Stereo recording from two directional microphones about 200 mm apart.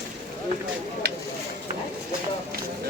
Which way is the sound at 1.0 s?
55° right (ahead or behind).